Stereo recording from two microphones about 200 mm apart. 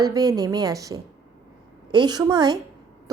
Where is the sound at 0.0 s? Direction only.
20° right (ahead or behind).